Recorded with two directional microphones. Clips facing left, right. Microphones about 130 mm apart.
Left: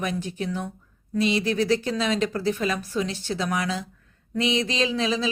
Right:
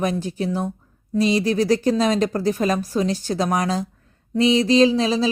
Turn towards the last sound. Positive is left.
turn(degrees=-35)  # may be behind; listen again after turning